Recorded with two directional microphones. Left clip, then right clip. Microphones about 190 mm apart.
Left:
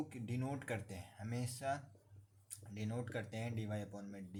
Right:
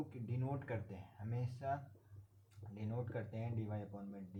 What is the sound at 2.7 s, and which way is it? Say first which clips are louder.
Speech: left 1 dB; 65° left (ahead or behind).